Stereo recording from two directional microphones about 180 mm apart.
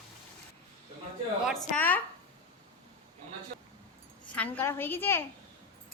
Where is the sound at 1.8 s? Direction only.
10° left (ahead or behind).